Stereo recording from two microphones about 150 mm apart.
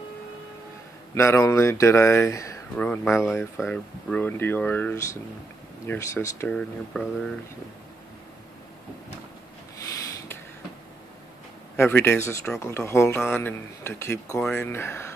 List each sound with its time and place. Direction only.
1.1 s speech: 20° left (ahead or behind)
2.7 s speech: 10° left (ahead or behind)
6.6 s speech: 5° left (ahead or behind)
11.7 s speech: 15° left (ahead or behind)